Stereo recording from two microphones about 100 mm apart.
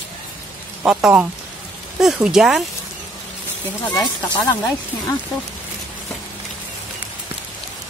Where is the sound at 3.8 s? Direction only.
40° left (ahead or behind).